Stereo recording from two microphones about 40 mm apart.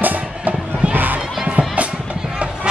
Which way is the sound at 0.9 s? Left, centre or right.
Right.